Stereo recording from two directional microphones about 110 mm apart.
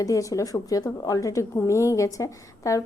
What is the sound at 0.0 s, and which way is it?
A woman's voice, 30° left (ahead or behind).